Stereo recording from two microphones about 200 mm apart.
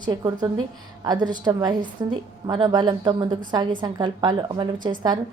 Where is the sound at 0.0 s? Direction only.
20° right (ahead or behind).